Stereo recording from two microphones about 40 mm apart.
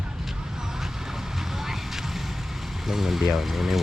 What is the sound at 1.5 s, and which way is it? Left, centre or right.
Vehicle, centre.